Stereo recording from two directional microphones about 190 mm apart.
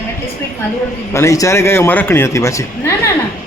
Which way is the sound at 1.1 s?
15° left (ahead or behind).